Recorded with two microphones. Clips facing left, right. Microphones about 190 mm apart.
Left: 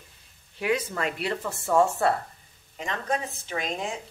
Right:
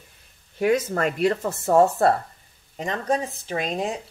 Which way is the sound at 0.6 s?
45° right (ahead or behind).